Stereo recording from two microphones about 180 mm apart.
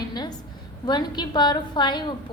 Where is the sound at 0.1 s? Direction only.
20° left (ahead or behind).